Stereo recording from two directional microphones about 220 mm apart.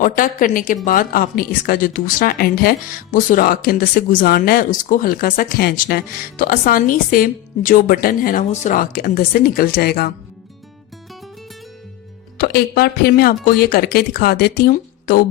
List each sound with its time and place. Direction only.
0.0 s speech: 40° left (ahead or behind)
12.4 s speech: 45° left (ahead or behind)